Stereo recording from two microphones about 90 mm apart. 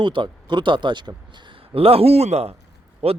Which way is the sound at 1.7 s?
90° right.